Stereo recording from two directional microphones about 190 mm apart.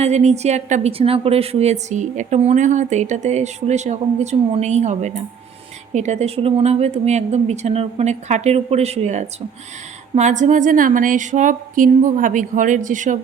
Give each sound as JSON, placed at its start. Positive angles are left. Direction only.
{"t": 0.0, "sound": "a woman's voice", "side_deg": -35}